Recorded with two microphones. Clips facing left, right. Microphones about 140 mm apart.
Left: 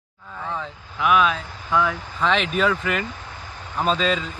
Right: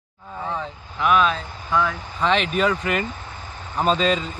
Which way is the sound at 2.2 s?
Centre (ahead or behind).